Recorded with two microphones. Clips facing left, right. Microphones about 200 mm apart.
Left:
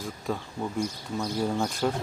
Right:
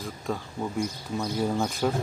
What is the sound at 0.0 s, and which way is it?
Speech, centre (ahead or behind).